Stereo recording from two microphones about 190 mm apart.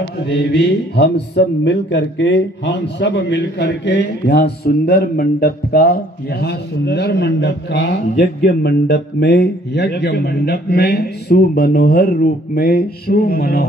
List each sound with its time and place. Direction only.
0.3 s speech: 60° left (ahead or behind)